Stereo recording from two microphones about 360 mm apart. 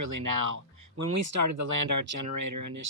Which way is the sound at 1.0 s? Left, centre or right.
Right.